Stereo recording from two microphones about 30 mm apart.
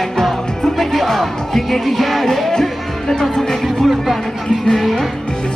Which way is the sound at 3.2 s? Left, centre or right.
Centre.